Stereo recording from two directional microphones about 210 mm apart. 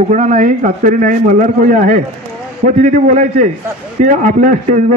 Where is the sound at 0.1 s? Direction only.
35° right (ahead or behind).